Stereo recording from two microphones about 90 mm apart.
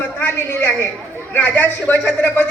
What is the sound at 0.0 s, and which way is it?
A woman's voice, 20° left (ahead or behind).